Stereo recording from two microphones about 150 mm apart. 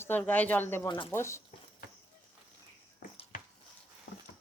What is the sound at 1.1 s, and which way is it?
Speech, 15° left (ahead or behind).